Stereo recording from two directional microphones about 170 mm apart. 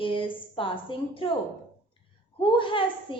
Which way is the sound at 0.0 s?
30° left (ahead or behind).